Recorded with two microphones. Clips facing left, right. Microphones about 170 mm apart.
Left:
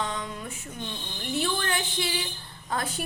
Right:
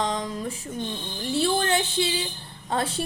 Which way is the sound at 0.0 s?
35° right (ahead or behind).